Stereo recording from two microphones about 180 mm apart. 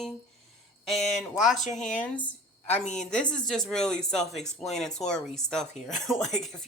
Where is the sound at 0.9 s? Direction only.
Centre (ahead or behind).